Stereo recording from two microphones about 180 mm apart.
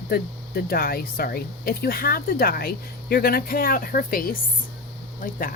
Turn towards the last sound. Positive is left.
turn(degrees=50)  # may be behind; listen again after turning